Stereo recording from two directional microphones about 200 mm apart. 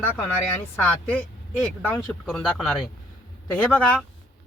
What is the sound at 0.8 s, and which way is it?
Speech, 10° left (ahead or behind).